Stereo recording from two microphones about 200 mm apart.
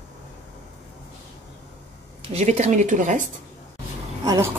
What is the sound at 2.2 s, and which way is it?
A woman's voice, 35° right (ahead or behind).